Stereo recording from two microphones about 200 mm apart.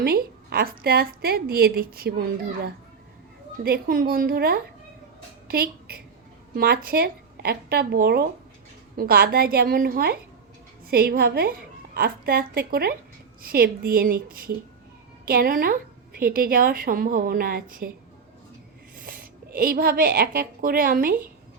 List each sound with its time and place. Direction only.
0.0 s a woman's voice: 50° right (ahead or behind)
3.6 s a woman's voice: 45° right (ahead or behind)
18.9 s a woman's voice: 45° right (ahead or behind)